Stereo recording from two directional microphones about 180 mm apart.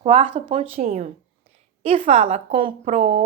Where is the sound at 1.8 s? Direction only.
30° right (ahead or behind).